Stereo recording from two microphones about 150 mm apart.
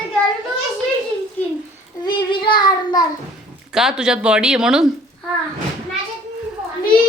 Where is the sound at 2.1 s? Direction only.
30° left (ahead or behind).